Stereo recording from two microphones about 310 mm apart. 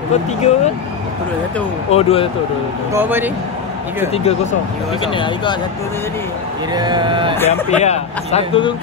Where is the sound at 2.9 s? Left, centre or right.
Centre.